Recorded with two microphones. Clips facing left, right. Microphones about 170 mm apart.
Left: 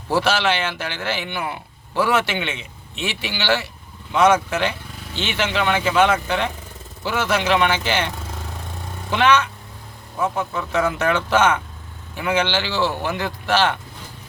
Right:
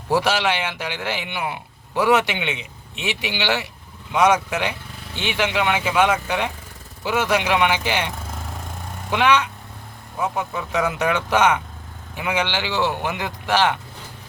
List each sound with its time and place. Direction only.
0.1 s a man's voice: 15° right (ahead or behind)
9.1 s a man's voice: 15° right (ahead or behind)